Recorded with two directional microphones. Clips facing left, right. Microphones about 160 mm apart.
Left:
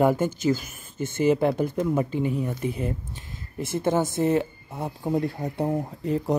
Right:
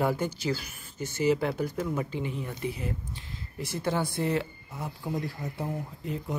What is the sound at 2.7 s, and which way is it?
Speech, 50° left (ahead or behind).